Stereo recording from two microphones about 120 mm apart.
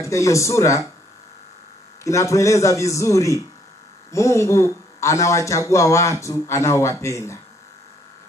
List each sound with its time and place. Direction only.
0.0 s speech: 25° left (ahead or behind)
2.0 s speech: 25° left (ahead or behind)